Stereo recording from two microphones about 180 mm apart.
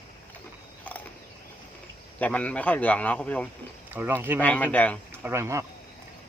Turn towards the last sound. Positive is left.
turn(degrees=-15)  # may be behind; listen again after turning